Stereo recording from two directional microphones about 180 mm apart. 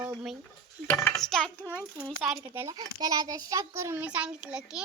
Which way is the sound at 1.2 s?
Centre (ahead or behind).